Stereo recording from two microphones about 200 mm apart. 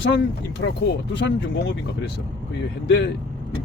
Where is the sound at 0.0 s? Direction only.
60° left (ahead or behind).